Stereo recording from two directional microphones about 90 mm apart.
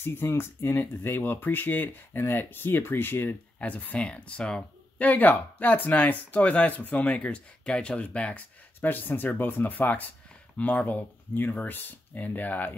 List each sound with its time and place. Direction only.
0.0 s speech: 25° left (ahead or behind)